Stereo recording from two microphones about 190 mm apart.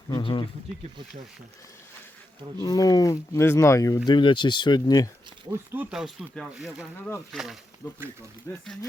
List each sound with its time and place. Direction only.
0.1 s speech: 25° left (ahead or behind)
2.6 s speech: 20° left (ahead or behind)
5.5 s speech: 10° right (ahead or behind)
8.6 s speech: centre (ahead or behind)